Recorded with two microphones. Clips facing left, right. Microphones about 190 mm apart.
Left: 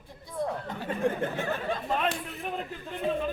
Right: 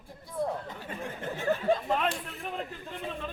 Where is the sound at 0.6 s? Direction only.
60° left (ahead or behind).